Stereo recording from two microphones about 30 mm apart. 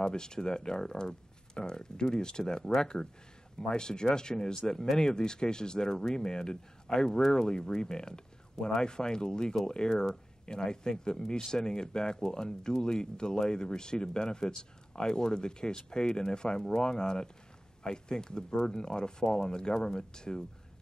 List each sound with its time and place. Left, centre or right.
0.0 s speech: left